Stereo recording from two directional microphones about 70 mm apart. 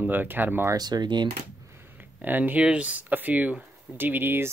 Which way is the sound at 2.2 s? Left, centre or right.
Right.